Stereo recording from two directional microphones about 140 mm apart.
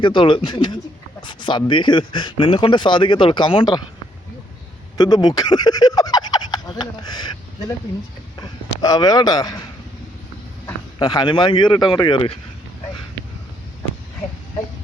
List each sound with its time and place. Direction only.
0.0 s speech: 35° left (ahead or behind)
4.9 s speech: 30° left (ahead or behind)
8.4 s speech: 25° left (ahead or behind)
11.0 s speech: 30° left (ahead or behind)